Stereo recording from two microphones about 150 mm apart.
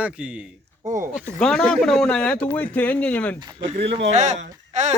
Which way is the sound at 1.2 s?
5° left (ahead or behind).